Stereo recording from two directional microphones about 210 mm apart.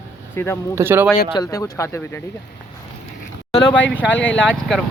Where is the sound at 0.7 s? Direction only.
10° right (ahead or behind).